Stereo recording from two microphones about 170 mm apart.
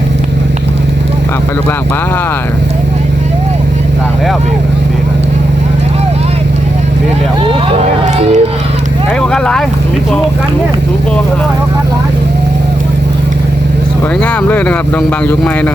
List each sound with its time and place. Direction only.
7.8 s speech: 40° right (ahead or behind)
9.2 s speech: 5° left (ahead or behind)